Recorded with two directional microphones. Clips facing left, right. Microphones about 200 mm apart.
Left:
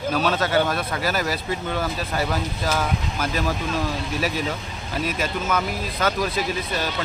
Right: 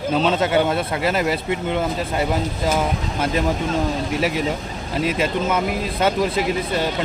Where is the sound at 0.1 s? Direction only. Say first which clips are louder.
Right 3 dB; 25° right (ahead or behind).